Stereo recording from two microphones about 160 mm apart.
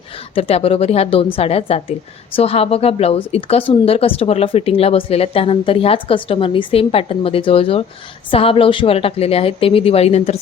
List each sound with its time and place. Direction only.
0.3 s a woman's voice: 35° left (ahead or behind)